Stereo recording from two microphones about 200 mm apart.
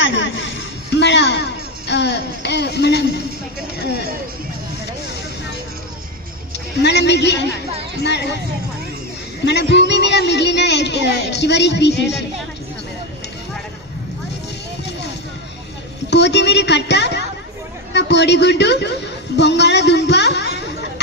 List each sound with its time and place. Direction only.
0.0 s a sound: 65° left (ahead or behind)
1.9 s speech: 60° left (ahead or behind)
6.5 s a woman's voice: 60° left (ahead or behind)
9.4 s speech: 60° left (ahead or behind)
16.0 s speech: 60° left (ahead or behind)